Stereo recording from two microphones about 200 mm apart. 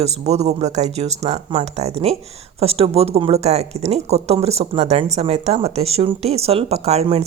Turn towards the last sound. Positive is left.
turn(degrees=-30)  # may be behind; listen again after turning